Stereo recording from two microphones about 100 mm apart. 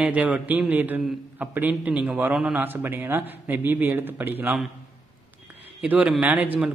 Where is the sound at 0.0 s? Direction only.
10° right (ahead or behind).